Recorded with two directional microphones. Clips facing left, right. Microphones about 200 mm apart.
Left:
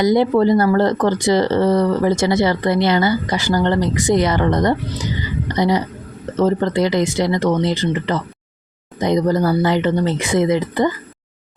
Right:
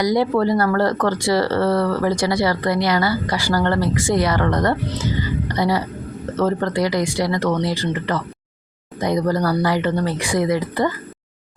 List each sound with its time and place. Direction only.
0.0 s speech: 25° left (ahead or behind)